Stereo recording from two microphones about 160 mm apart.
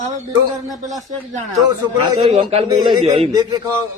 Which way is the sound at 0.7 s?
Centre (ahead or behind).